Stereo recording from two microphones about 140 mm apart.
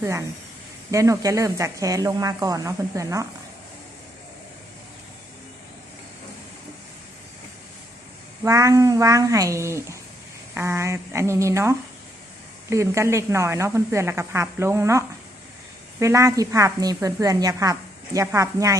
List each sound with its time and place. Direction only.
0.0 s a woman's voice: 20° right (ahead or behind)
8.4 s a woman's voice: 25° right (ahead or behind)